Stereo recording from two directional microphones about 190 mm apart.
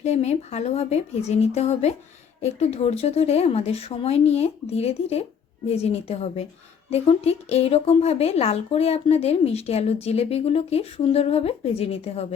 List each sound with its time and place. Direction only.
0.0 s a woman's voice: 35° left (ahead or behind)